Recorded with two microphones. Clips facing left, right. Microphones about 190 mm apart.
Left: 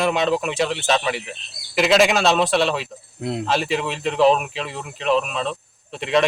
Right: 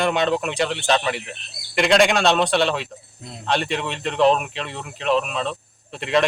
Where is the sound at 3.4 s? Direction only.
Centre (ahead or behind).